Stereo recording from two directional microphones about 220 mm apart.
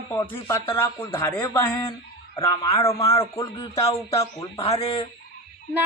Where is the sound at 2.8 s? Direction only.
15° left (ahead or behind).